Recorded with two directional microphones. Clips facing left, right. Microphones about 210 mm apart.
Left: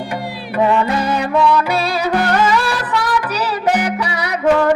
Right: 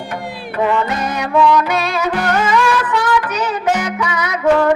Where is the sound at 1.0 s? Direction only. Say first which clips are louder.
Even; 30° left (ahead or behind).